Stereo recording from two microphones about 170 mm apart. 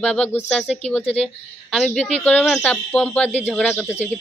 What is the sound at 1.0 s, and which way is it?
Speech, 35° left (ahead or behind).